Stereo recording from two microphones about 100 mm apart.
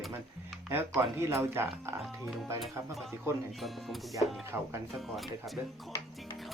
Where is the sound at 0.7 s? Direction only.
25° right (ahead or behind).